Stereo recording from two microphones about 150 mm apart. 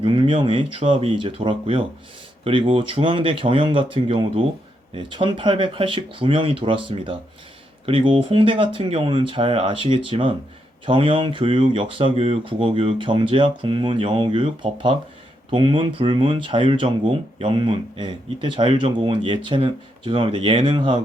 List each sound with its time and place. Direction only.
0.0 s speech: 35° right (ahead or behind)